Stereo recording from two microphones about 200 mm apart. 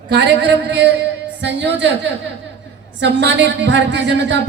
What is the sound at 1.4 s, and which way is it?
Speech, 60° right (ahead or behind).